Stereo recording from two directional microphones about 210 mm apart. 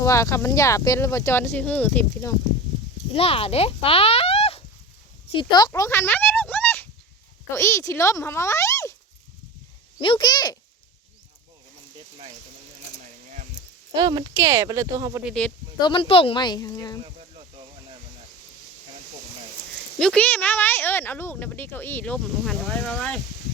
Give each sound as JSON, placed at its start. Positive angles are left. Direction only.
{"t": 0.0, "sound": "speech", "side_deg": 15}
{"t": 3.2, "sound": "speech", "side_deg": 30}
{"t": 5.3, "sound": "a sound", "side_deg": 20}
{"t": 7.5, "sound": "speech", "side_deg": 15}
{"t": 10.0, "sound": "speech", "side_deg": 20}
{"t": 13.9, "sound": "speech", "side_deg": -20}
{"t": 15.2, "sound": "speech", "side_deg": 0}
{"t": 15.8, "sound": "speech", "side_deg": 25}
{"t": 20.0, "sound": "speech", "side_deg": 5}